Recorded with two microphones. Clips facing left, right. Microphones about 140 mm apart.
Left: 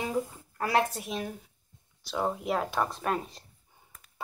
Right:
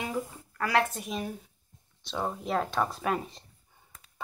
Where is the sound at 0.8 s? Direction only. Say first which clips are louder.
Even; 5° left (ahead or behind).